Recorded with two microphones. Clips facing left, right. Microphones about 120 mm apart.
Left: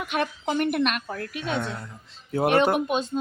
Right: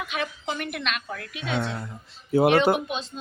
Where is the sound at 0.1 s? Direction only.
50° left (ahead or behind).